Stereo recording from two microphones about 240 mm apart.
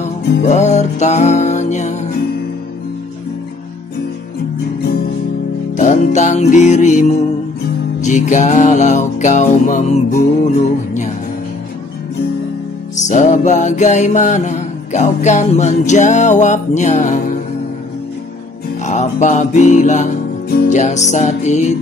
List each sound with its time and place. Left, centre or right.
0.4 s music: left
5.8 s music: left
13.1 s music: left
18.9 s music: left